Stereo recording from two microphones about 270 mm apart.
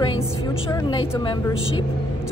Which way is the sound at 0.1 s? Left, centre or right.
Centre.